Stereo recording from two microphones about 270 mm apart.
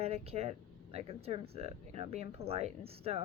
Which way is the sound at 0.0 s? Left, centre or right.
Right.